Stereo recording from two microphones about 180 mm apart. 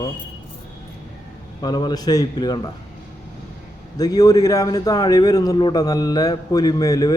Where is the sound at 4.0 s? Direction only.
20° left (ahead or behind).